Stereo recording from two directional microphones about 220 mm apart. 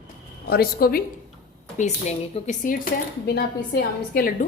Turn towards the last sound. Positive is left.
turn(degrees=45)  # may be behind; listen again after turning